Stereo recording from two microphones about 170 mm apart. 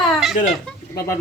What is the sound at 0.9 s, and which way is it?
Speech, 15° left (ahead or behind).